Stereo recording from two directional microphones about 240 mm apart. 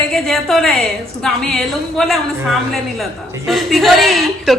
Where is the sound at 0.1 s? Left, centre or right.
Centre.